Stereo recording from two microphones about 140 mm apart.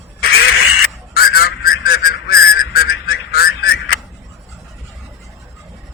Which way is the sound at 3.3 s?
90° left.